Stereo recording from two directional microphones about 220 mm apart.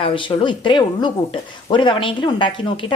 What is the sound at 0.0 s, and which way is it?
A woman's voice, 25° left (ahead or behind).